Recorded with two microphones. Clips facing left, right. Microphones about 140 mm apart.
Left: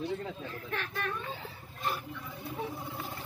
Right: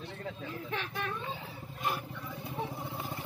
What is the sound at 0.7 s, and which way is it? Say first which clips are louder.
Speech: left 1 dB; 15° right (ahead or behind).